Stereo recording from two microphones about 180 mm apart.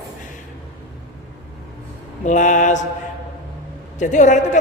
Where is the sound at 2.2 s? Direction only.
45° left (ahead or behind).